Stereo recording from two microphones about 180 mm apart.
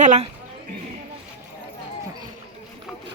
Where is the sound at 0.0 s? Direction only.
40° right (ahead or behind).